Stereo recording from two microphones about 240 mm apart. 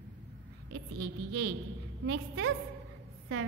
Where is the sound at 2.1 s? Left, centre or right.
Right.